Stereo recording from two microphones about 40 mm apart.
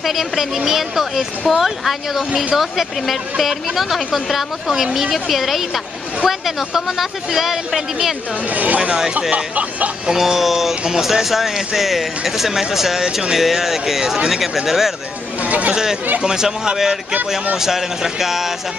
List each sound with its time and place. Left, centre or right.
0.0 s speech: centre
8.5 s speech: right
10.0 s speech: centre
15.4 s speech: right
15.7 s speech: centre